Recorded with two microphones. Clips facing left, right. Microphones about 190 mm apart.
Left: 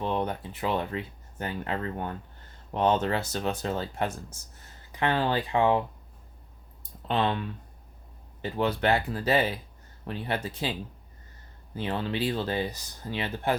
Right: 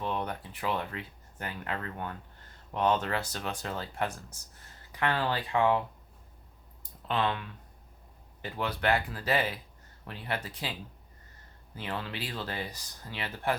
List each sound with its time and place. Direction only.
0.0 s speech: 25° left (ahead or behind)
7.1 s speech: 25° left (ahead or behind)
11.8 s speech: 25° left (ahead or behind)